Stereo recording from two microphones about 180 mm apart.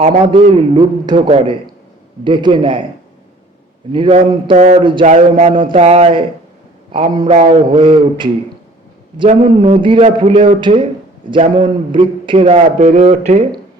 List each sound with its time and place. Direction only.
0.0 s a man's voice: 30° right (ahead or behind)
3.9 s a man's voice: 30° right (ahead or behind)
5.0 s a man's voice: 40° right (ahead or behind)
7.3 s a man's voice: 40° right (ahead or behind)
9.6 s a man's voice: 30° right (ahead or behind)
10.6 s a man's voice: 25° right (ahead or behind)